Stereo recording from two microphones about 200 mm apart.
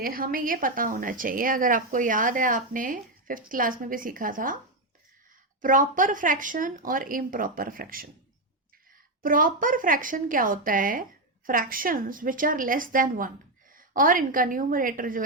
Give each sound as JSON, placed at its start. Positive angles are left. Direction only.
{"t": 0.0, "sound": "a woman's voice", "side_deg": -45}
{"t": 5.6, "sound": "a woman's voice", "side_deg": -40}
{"t": 9.2, "sound": "a woman's voice", "side_deg": -45}